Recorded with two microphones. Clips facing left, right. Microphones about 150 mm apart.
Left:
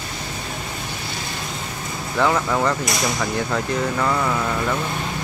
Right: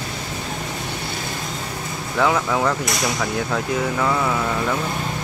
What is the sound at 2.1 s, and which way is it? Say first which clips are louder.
Speech: even; centre (ahead or behind).